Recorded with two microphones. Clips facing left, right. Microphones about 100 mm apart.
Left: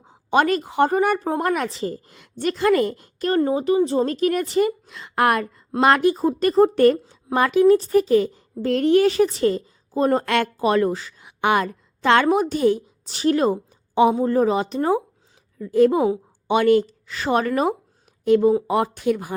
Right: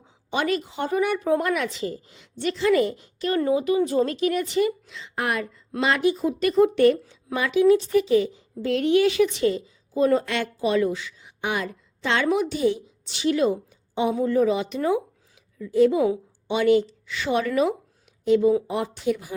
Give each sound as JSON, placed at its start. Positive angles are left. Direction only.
{"t": 0.0, "sound": "a woman's voice", "side_deg": 50}
{"t": 10.2, "sound": "a woman's voice", "side_deg": 55}
{"t": 11.2, "sound": "speech", "side_deg": 65}
{"t": 11.6, "sound": "a woman's voice", "side_deg": 50}
{"t": 14.1, "sound": "speech", "side_deg": 40}
{"t": 15.5, "sound": "a woman's voice", "side_deg": 50}